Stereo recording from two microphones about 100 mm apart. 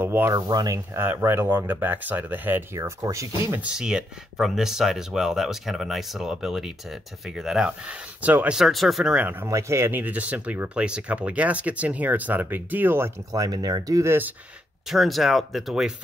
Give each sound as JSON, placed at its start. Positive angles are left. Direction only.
{"t": 0.0, "sound": "a sound", "side_deg": -20}
{"t": 0.3, "sound": "speech", "side_deg": -45}
{"t": 0.9, "sound": "speech", "side_deg": -25}
{"t": 2.8, "sound": "speech", "side_deg": -30}
{"t": 3.6, "sound": "speech", "side_deg": -5}
{"t": 8.5, "sound": "speech", "side_deg": 0}
{"t": 9.5, "sound": "speech", "side_deg": -30}
{"t": 13.3, "sound": "speech", "side_deg": -35}
{"t": 14.9, "sound": "speech", "side_deg": 0}